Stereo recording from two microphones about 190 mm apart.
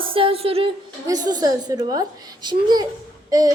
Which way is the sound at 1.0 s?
20° right (ahead or behind).